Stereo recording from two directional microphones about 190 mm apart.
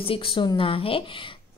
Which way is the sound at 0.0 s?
25° left (ahead or behind).